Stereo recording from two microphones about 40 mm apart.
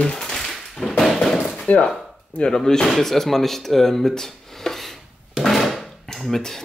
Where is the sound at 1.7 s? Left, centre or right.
Left.